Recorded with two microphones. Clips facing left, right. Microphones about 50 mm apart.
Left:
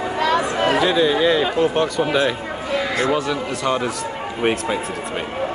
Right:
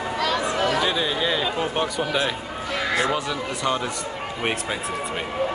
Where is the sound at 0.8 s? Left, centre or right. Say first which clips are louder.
Left 7 dB; centre.